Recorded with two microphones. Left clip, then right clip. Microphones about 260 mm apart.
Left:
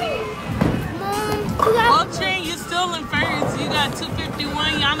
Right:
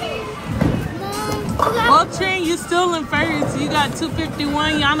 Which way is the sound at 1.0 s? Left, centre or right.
Left.